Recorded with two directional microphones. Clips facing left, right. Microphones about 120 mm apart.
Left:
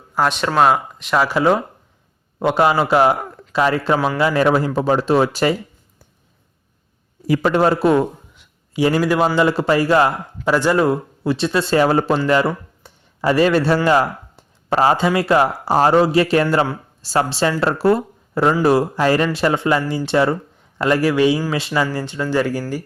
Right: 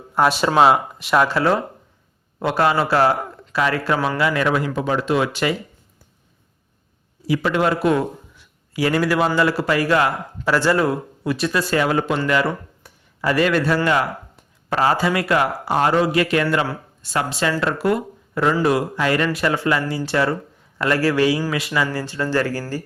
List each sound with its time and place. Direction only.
0.1 s speech: centre (ahead or behind)
1.3 s speech: 15° left (ahead or behind); by 5.5 s 40° left (ahead or behind)
7.3 s a man's voice: 40° left (ahead or behind)
10.5 s speech: 20° left (ahead or behind)